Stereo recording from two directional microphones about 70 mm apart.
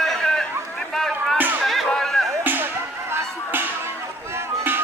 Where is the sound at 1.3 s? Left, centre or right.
Right.